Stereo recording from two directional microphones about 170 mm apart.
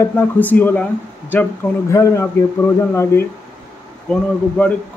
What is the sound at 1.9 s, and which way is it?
A man's voice, 15° left (ahead or behind).